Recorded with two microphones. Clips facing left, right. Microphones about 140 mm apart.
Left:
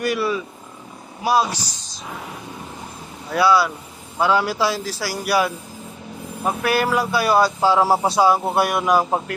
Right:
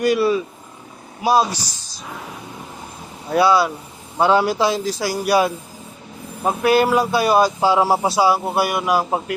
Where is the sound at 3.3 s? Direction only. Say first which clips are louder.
Right 2 dB; 25° right (ahead or behind).